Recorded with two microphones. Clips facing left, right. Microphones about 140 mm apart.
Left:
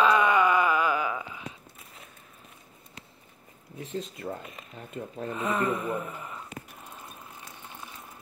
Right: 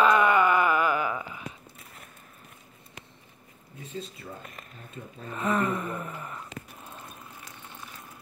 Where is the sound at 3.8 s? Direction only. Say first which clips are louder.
Left 4 dB; 90° left.